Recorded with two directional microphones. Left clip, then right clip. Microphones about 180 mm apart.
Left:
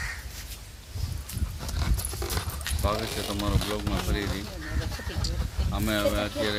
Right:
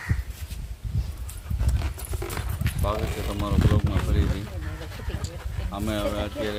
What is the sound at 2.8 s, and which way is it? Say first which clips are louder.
Speech: even; centre (ahead or behind).